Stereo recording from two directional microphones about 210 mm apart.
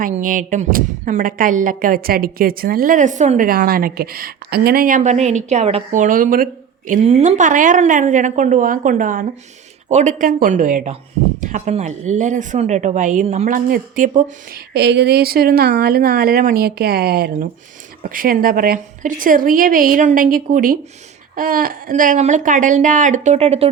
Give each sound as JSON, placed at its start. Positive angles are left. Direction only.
{"t": 0.0, "sound": "a woman's voice", "side_deg": -40}